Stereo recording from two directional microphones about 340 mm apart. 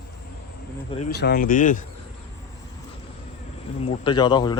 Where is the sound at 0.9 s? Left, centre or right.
Left.